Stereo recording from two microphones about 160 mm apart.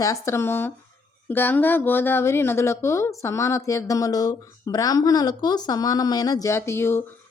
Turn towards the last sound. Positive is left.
turn(degrees=15)  # may be behind; listen again after turning